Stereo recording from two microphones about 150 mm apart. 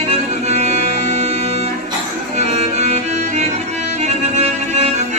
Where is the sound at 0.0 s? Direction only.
45° right (ahead or behind).